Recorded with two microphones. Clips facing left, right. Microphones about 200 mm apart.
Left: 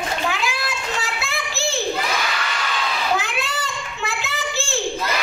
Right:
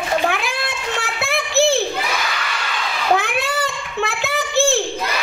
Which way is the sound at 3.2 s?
55° right (ahead or behind).